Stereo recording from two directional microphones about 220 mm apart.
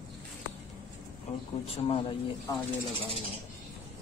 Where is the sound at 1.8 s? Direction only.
25° left (ahead or behind).